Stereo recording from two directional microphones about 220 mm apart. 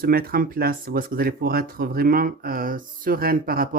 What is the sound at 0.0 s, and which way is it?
Speech, 45° right (ahead or behind).